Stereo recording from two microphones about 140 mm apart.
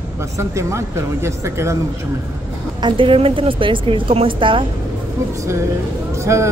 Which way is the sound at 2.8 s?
40° right (ahead or behind).